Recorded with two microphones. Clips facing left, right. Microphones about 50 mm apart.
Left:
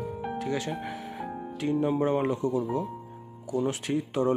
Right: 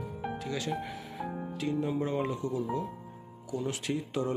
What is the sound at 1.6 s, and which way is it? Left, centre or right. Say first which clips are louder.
Speech: left 6 dB; left.